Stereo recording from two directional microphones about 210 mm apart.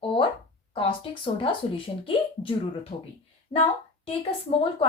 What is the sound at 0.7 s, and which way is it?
A woman's voice, 25° left (ahead or behind).